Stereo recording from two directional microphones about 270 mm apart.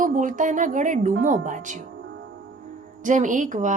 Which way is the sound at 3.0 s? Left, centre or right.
Right.